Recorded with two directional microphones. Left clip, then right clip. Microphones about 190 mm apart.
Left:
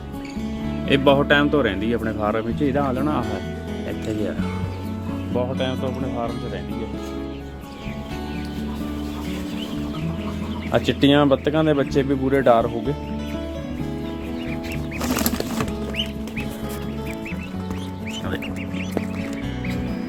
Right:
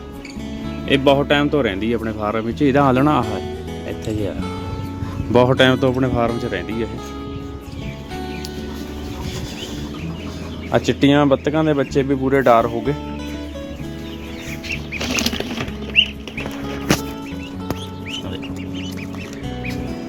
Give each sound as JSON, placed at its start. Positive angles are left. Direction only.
{"t": 0.9, "sound": "speech", "side_deg": 0}
{"t": 2.6, "sound": "speech", "side_deg": -30}
{"t": 2.8, "sound": "speech", "side_deg": -40}
{"t": 4.1, "sound": "speech", "side_deg": 0}
{"t": 5.3, "sound": "speech", "side_deg": -50}
{"t": 10.7, "sound": "speech", "side_deg": -10}